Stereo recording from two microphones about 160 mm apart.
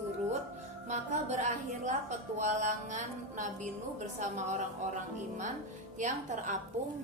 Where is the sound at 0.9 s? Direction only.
45° right (ahead or behind).